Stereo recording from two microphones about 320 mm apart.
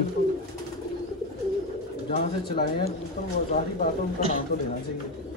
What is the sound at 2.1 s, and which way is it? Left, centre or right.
Speech, centre.